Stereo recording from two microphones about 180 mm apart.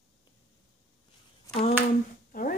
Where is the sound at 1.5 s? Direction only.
35° left (ahead or behind).